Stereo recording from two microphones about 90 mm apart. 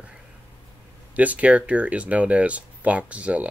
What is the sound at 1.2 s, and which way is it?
Speech, 15° right (ahead or behind).